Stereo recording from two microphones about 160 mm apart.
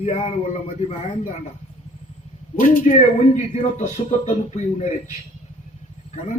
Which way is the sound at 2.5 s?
55° left (ahead or behind).